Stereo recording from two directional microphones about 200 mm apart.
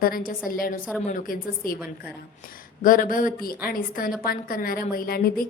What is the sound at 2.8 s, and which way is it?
A woman's voice, 45° left (ahead or behind).